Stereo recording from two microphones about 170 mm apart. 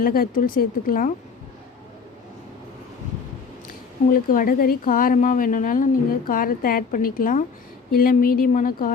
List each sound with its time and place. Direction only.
0.0 s a woman's voice: 60° left (ahead or behind)
4.1 s a woman's voice: 55° left (ahead or behind)